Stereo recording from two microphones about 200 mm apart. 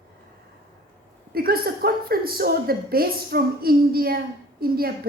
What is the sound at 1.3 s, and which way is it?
A woman's voice, 50° right (ahead or behind).